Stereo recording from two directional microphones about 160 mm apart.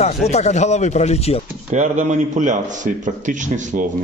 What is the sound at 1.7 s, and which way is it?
A man's voice, 50° right (ahead or behind).